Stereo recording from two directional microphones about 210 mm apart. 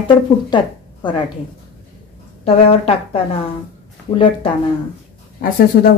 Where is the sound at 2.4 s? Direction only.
30° left (ahead or behind).